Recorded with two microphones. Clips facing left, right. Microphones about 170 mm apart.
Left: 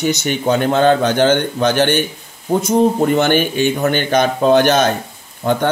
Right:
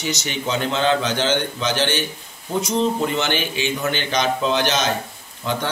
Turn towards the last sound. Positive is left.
turn(degrees=55)  # may be behind; listen again after turning